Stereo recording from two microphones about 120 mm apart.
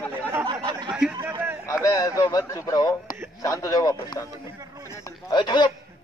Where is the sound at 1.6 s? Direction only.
25° left (ahead or behind).